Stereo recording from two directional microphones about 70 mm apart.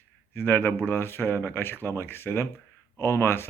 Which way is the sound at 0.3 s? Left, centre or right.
Left.